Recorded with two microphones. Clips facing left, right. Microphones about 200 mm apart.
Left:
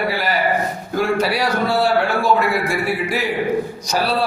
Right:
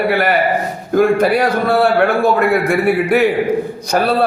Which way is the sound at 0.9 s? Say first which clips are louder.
Right 7 dB; 55° right (ahead or behind).